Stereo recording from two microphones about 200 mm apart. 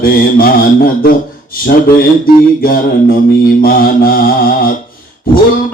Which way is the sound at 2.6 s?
45° left (ahead or behind).